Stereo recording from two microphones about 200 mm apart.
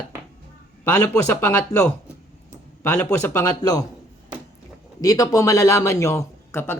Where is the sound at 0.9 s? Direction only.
10° left (ahead or behind).